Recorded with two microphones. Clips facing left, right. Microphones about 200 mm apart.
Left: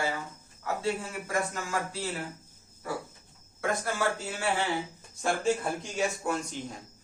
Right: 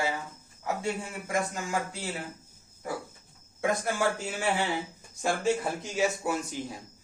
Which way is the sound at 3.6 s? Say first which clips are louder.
Right 2 dB; 15° right (ahead or behind).